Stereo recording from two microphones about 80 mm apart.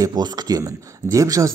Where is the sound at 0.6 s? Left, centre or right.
Right.